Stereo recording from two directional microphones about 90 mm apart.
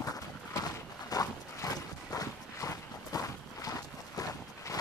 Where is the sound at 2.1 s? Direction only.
40° left (ahead or behind).